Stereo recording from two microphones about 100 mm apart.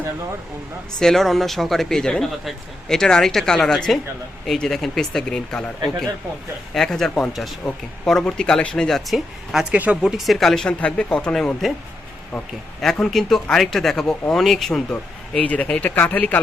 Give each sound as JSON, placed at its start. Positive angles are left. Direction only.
{"t": 0.9, "sound": "speech", "side_deg": 5}
{"t": 6.7, "sound": "speech", "side_deg": 5}
{"t": 9.7, "sound": "speech", "side_deg": -15}
{"t": 10.0, "sound": "speech", "side_deg": -5}
{"t": 12.8, "sound": "speech", "side_deg": 5}